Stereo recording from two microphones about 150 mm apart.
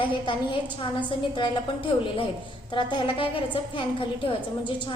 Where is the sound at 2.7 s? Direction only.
30° left (ahead or behind).